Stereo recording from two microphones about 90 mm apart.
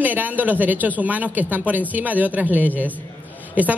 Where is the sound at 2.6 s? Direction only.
20° left (ahead or behind).